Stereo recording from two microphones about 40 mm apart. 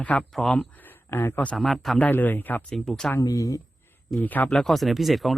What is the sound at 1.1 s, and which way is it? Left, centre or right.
Speech, left.